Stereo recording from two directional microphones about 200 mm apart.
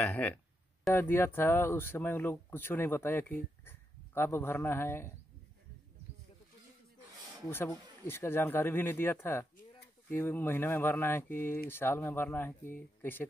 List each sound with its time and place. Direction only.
0.0 s speech: 10° left (ahead or behind)
7.4 s speech: 10° left (ahead or behind)